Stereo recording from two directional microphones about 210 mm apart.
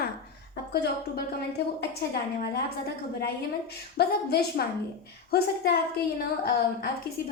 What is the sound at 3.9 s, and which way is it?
A woman's voice, 50° left (ahead or behind).